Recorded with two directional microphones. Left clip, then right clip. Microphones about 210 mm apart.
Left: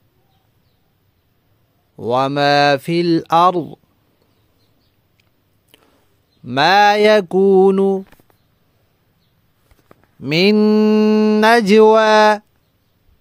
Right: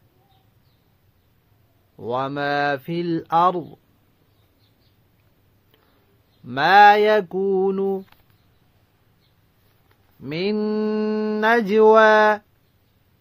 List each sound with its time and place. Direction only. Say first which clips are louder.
2.0 s speech: left 8 dB; 45° left (ahead or behind)
6.4 s speech: left 1 dB; 45° left (ahead or behind)
10.2 s mantra: left 10 dB; 60° left (ahead or behind)
10.6 s speech: left 9 dB; 45° left (ahead or behind)